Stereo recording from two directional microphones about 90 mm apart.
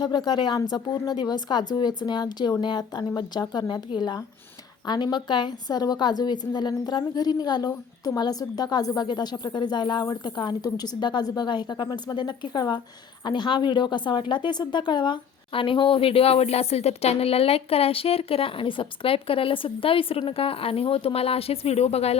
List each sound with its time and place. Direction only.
0.0 s a woman's voice: 55° left (ahead or behind); by 21.7 s 90° left